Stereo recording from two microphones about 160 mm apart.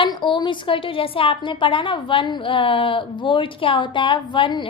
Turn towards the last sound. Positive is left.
turn(degrees=30)  # may be behind; listen again after turning